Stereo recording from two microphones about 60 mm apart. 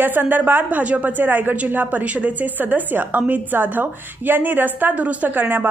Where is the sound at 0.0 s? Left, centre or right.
Right.